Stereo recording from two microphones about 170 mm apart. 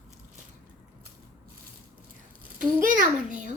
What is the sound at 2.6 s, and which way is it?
Speech, 55° right (ahead or behind).